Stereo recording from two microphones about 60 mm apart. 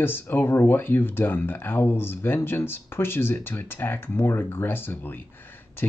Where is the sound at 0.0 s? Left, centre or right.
Left.